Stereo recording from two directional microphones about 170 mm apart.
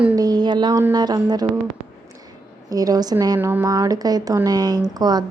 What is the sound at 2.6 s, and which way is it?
A woman's voice, 20° right (ahead or behind).